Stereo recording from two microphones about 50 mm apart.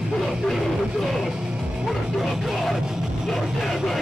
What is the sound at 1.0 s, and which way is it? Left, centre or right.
Music, centre.